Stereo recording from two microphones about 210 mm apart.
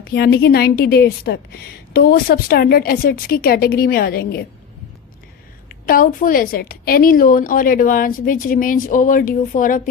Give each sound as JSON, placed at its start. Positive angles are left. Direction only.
{"t": 0.1, "sound": "a woman's voice", "side_deg": 50}
{"t": 5.8, "sound": "a woman's voice", "side_deg": 40}